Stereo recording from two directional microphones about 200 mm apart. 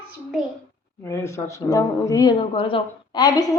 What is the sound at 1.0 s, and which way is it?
A woman's voice, 15° left (ahead or behind).